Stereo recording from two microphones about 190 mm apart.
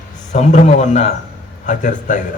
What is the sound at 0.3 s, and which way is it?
A man's voice, 35° left (ahead or behind).